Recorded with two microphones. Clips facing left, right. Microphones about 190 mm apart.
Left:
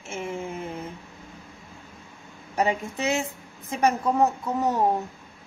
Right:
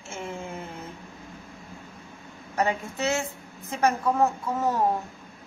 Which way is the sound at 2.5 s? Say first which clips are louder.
Left 2 dB; 15° left (ahead or behind).